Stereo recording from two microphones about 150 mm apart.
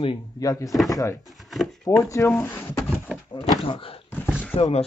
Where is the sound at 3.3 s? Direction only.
35° left (ahead or behind).